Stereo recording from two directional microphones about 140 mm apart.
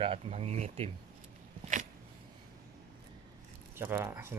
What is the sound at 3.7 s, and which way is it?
Speech, 15° right (ahead or behind).